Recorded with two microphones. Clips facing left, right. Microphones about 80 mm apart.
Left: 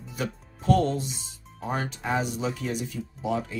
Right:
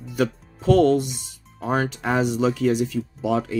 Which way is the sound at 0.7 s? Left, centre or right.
Right.